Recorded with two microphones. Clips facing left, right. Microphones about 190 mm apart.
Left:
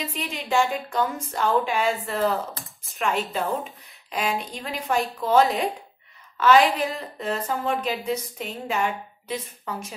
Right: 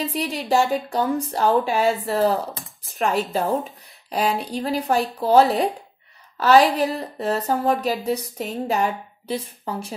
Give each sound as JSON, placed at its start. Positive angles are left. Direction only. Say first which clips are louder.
{"t": 0.0, "sound": "speech", "louder": "right 6 dB", "side_deg": -35}